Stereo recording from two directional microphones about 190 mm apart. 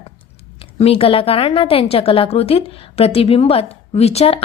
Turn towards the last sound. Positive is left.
turn(degrees=30)  # may be behind; listen again after turning